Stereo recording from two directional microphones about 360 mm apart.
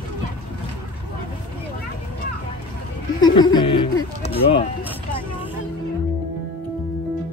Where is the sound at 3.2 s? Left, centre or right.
Centre.